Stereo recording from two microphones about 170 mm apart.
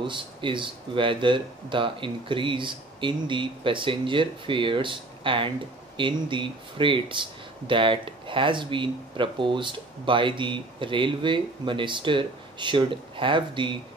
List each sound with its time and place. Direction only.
0.0 s speech: 30° right (ahead or behind)